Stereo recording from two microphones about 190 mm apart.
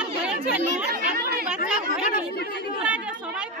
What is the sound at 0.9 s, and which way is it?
Chatter, 50° right (ahead or behind).